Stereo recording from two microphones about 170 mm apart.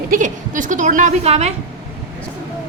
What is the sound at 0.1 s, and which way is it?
A woman's voice, 50° right (ahead or behind).